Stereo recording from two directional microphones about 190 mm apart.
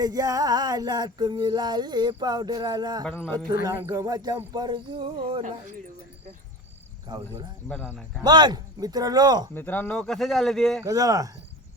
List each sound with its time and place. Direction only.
0.0 s music: 20° right (ahead or behind)
3.0 s speech: 10° left (ahead or behind)
3.7 s music: 20° right (ahead or behind)
5.4 s speech: 40° right (ahead or behind)
7.1 s music: 25° right (ahead or behind)
7.7 s speech: 5° left (ahead or behind)
8.2 s music: 25° right (ahead or behind)
9.6 s speech: 10° left (ahead or behind)
10.8 s music: 20° right (ahead or behind)